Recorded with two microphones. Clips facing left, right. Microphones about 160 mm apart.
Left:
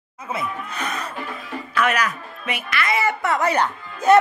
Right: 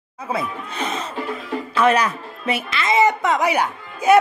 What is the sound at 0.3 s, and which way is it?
A woman's voice, 30° right (ahead or behind).